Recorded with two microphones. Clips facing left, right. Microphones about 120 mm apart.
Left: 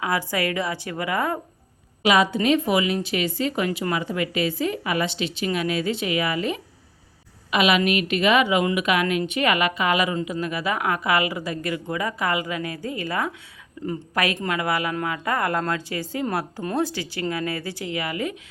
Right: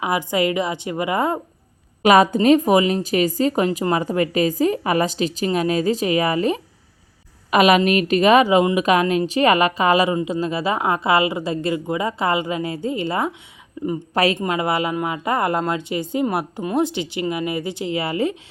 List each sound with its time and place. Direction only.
0.0 s a woman's voice: 20° right (ahead or behind)
2.0 s a woman's voice: 45° right (ahead or behind); by 18.3 s 30° right (ahead or behind)